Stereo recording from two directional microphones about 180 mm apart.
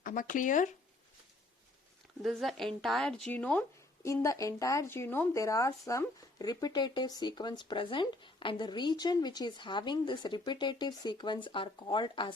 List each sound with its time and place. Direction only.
0.0 s speech: 45° left (ahead or behind)
2.2 s speech: centre (ahead or behind); by 12.3 s 25° left (ahead or behind)